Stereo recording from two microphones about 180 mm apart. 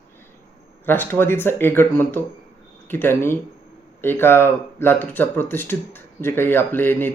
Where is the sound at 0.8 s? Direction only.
10° left (ahead or behind).